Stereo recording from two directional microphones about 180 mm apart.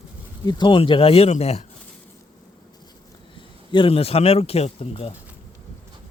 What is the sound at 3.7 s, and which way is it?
Speech, 30° left (ahead or behind).